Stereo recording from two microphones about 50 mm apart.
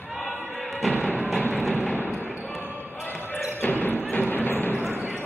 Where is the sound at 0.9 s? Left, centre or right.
Left.